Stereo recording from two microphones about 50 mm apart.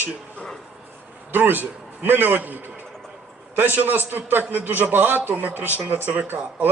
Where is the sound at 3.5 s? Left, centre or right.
Right.